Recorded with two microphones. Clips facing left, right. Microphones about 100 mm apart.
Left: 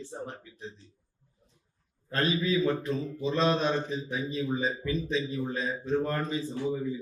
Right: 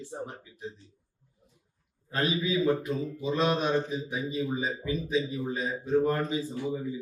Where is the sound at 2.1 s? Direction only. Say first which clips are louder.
Left 1 dB; 10° right (ahead or behind).